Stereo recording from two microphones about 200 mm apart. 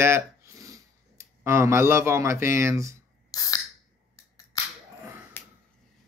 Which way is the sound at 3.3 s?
15° left (ahead or behind).